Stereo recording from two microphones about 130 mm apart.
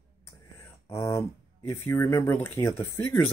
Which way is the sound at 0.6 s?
20° left (ahead or behind).